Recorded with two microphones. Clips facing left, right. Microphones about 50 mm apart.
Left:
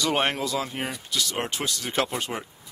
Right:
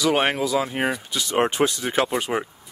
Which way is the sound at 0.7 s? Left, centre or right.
Right.